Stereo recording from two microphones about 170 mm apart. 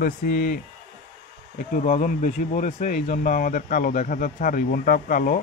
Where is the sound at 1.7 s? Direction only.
50° left (ahead or behind).